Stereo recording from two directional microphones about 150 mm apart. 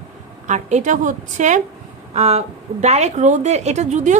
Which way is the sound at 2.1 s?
45° right (ahead or behind).